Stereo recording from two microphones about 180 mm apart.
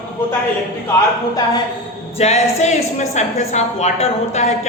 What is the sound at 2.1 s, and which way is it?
A woman's voice, 35° left (ahead or behind).